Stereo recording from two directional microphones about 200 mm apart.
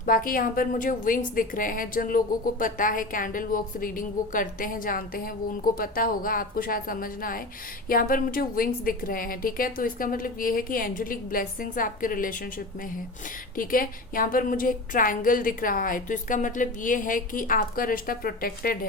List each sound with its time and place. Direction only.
0.0 s a woman's voice: 45° left (ahead or behind)
13.6 s a woman's voice: 45° left (ahead or behind)